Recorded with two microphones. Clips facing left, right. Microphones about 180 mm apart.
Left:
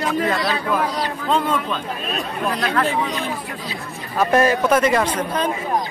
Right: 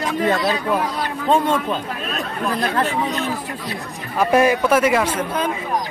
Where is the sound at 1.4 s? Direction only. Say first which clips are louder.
Right 2 dB; 25° right (ahead or behind).